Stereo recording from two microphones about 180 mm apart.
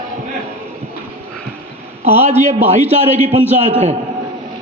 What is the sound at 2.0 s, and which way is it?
Speech, 35° right (ahead or behind).